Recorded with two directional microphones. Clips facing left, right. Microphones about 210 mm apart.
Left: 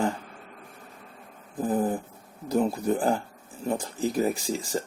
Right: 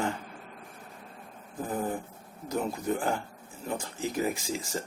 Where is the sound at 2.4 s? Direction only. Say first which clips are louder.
Left 6 dB; 35° left (ahead or behind).